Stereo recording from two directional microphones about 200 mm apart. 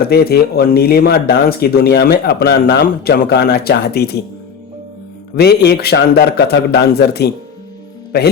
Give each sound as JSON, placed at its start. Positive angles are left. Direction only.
{"t": 0.1, "sound": "speech", "side_deg": 50}
{"t": 5.4, "sound": "speech", "side_deg": 55}